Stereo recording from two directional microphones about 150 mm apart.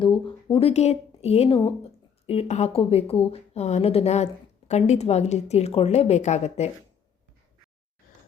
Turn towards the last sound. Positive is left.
turn(degrees=45)  # may be behind; listen again after turning